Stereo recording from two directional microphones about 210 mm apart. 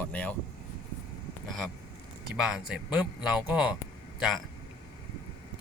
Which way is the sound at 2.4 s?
5° right (ahead or behind).